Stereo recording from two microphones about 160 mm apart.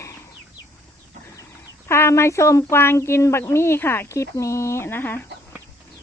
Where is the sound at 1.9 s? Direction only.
15° left (ahead or behind).